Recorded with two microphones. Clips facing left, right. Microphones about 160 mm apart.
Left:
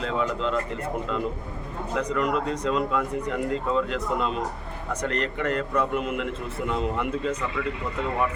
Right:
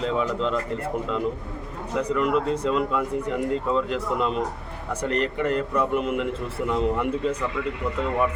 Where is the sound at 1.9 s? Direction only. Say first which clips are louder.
Right 3 dB; 5° right (ahead or behind).